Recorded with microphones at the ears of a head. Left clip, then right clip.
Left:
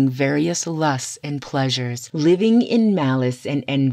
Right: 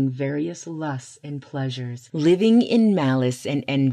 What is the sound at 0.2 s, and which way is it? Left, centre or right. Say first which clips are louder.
Speech: left 7 dB; left.